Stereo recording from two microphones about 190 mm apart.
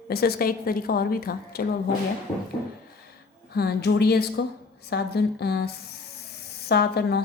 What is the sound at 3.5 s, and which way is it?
A woman's voice, 55° left (ahead or behind).